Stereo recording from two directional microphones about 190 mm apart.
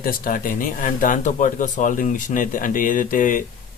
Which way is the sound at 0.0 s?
50° left (ahead or behind).